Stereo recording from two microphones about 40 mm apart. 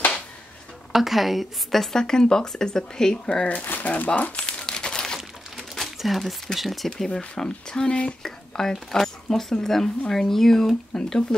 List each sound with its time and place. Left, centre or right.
0.9 s a woman's voice: centre
3.6 s speech: left
4.5 s crumpling: left
5.0 s a sound: centre
5.9 s speech: centre
7.1 s a woman's voice: centre